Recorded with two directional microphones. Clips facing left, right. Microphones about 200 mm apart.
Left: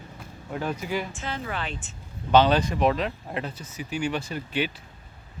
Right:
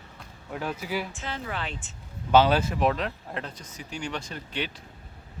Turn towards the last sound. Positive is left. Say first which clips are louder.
# left 5 dB
turn(degrees=5)  # may be behind; listen again after turning